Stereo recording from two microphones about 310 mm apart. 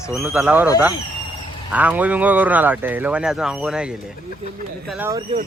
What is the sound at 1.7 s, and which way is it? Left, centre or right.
Speech, centre.